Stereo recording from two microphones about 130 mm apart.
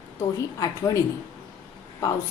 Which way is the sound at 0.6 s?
25° left (ahead or behind).